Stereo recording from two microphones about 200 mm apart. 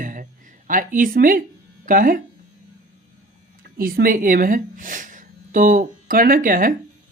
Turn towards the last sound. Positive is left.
turn(degrees=-45)  # may be behind; listen again after turning